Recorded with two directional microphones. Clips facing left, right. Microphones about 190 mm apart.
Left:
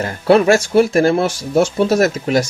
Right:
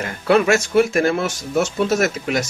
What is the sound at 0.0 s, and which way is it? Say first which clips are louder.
Speech: left 4 dB; 35° left (ahead or behind).